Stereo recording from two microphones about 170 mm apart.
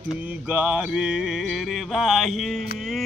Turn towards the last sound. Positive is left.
turn(degrees=0)  # may be behind; listen again after turning